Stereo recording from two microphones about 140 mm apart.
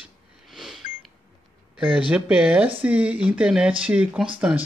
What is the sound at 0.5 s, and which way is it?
Beep, centre (ahead or behind).